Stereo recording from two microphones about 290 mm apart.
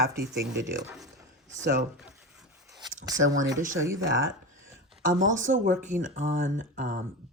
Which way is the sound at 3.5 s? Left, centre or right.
Right.